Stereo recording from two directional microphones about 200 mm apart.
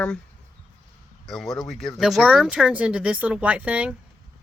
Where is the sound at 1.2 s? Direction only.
Centre (ahead or behind).